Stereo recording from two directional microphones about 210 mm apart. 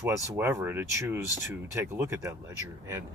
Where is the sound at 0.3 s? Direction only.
10° right (ahead or behind).